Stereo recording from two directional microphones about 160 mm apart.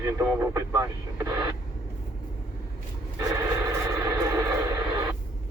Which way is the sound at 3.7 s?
20° right (ahead or behind).